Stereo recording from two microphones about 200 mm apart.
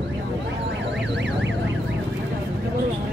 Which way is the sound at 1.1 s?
60° right (ahead or behind).